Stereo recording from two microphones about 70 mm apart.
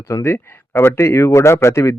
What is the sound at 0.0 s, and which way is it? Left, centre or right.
Speech, left.